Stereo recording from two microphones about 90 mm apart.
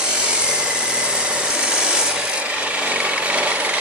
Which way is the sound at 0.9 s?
10° right (ahead or behind).